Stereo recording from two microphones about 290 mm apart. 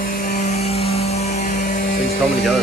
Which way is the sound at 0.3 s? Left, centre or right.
Left.